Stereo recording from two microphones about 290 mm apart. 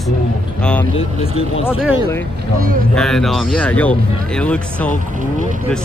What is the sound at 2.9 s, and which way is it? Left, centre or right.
Speech, centre.